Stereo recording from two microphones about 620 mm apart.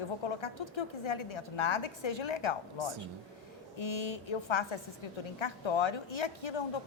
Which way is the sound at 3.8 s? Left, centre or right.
Left.